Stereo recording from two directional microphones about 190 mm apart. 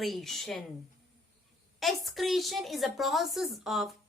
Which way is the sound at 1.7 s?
Centre (ahead or behind).